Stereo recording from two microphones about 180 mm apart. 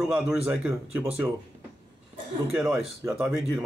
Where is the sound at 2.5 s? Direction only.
5° right (ahead or behind).